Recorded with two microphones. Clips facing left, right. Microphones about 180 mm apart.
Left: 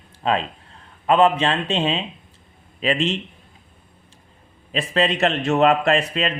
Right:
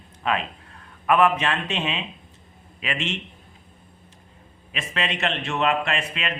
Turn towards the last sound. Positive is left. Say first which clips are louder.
# left 8 dB
turn(degrees=35)  # may be behind; listen again after turning